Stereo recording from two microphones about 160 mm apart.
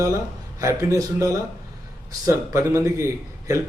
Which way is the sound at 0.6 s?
20° right (ahead or behind).